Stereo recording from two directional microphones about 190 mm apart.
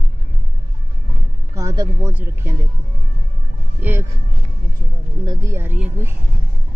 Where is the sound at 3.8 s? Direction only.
10° right (ahead or behind).